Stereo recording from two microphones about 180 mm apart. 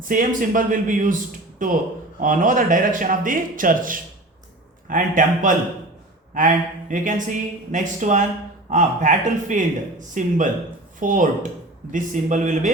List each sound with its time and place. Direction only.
0.0 s speech: 50° right (ahead or behind)
6.9 s speech: 45° right (ahead or behind)